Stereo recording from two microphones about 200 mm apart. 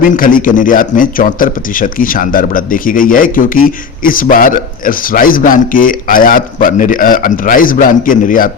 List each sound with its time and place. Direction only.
0.0 s a man's voice: 45° left (ahead or behind)